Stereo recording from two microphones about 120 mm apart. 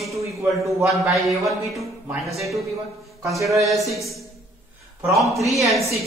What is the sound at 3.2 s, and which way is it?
Speech, 25° right (ahead or behind).